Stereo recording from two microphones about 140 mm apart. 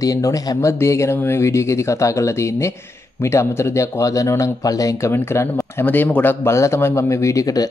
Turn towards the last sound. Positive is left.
turn(degrees=25)  # may be behind; listen again after turning